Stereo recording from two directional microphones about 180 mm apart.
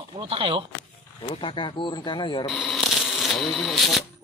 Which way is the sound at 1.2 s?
30° left (ahead or behind).